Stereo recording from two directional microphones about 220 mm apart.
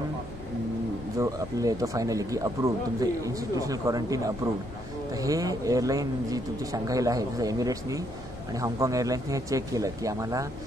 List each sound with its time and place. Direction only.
1.1 s speech: 15° right (ahead or behind)